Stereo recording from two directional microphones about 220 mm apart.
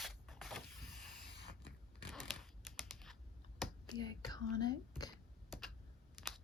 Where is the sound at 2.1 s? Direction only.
Centre (ahead or behind).